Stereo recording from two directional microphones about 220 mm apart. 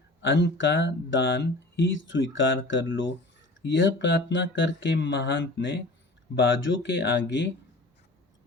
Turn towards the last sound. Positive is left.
turn(degrees=55)  # may be behind; listen again after turning